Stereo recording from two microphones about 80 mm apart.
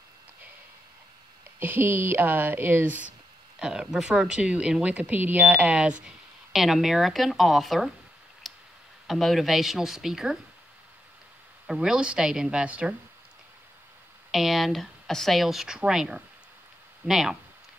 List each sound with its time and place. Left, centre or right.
1.6 s speech: right
3.5 s speech: centre
8.4 s clicking: centre
9.0 s speech: centre
11.6 s speech: centre
14.3 s speech: centre